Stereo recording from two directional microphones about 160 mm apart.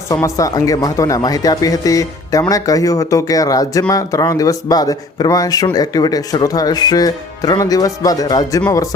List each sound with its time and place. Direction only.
0.1 s speech: 20° left (ahead or behind)